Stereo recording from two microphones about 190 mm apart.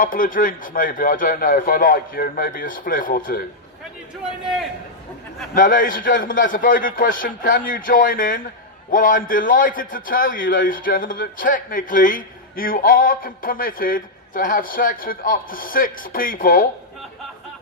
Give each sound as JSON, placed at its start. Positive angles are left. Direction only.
{"t": 0.0, "sound": "a man's voice", "side_deg": 45}
{"t": 4.2, "sound": "a man's voice", "side_deg": 0}
{"t": 5.5, "sound": "a man's voice", "side_deg": 45}